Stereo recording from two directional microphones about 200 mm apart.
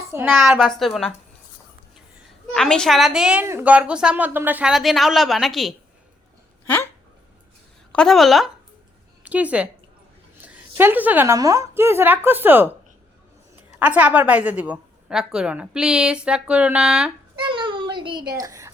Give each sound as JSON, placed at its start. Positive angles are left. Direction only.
{"t": 0.1, "sound": "a woman's voice", "side_deg": -10}
{"t": 0.3, "sound": "a woman's voice", "side_deg": 0}
{"t": 2.5, "sound": "a woman's voice", "side_deg": 5}
{"t": 7.9, "sound": "a woman's voice", "side_deg": 0}
{"t": 13.7, "sound": "a woman's voice", "side_deg": -5}
{"t": 17.3, "sound": "a sound", "side_deg": -25}
{"t": 18.3, "sound": "speech", "side_deg": -15}